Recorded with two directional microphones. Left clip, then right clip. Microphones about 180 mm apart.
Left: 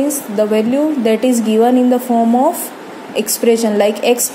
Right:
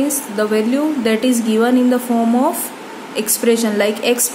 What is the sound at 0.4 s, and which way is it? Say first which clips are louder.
A woman's voice: left 3 dB; 15° left (ahead or behind).